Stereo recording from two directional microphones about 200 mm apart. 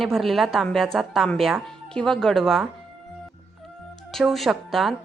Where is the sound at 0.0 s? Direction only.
Centre (ahead or behind).